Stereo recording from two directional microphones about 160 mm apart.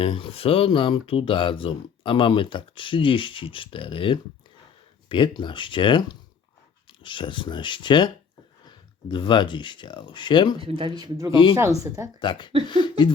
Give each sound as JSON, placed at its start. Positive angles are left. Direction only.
{"t": 0.0, "sound": "speech", "side_deg": 35}
{"t": 10.6, "sound": "speech", "side_deg": -35}
{"t": 12.2, "sound": "speech", "side_deg": 30}